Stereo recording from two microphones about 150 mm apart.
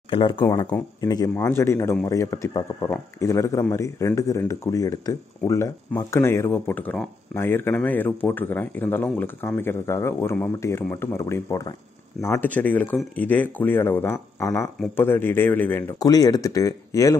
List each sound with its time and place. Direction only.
0.1 s speech: 35° left (ahead or behind); by 16.0 s 15° left (ahead or behind)
16.0 s speech: 25° left (ahead or behind)